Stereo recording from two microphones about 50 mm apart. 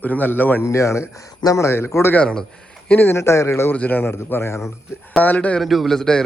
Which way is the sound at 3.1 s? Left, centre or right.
Left.